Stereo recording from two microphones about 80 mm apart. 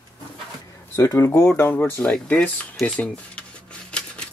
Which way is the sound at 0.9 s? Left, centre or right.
Left.